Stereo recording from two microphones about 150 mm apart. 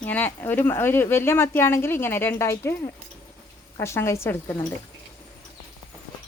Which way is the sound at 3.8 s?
20° left (ahead or behind).